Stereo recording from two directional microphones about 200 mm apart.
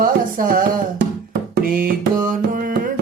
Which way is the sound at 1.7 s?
45° right (ahead or behind).